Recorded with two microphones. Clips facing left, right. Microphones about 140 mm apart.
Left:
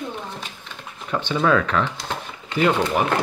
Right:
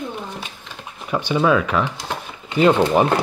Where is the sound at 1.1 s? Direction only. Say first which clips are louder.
Right 2 dB; 10° right (ahead or behind).